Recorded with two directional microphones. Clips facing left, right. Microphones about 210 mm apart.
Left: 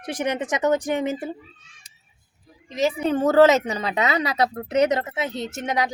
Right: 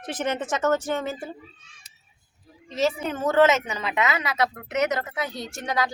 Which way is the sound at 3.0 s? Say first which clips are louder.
Left 5 dB; 35° left (ahead or behind).